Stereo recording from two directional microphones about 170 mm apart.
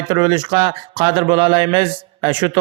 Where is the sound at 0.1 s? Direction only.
25° right (ahead or behind).